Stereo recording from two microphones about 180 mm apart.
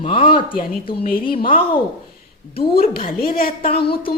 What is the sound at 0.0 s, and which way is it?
A woman's voice, 30° left (ahead or behind).